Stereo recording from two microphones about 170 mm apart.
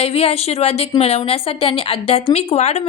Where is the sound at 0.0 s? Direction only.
35° left (ahead or behind).